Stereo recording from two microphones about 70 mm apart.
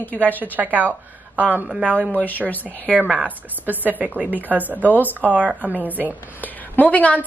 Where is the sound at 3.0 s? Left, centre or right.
Right.